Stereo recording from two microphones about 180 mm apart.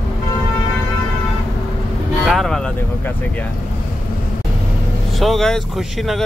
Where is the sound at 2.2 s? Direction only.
Centre (ahead or behind).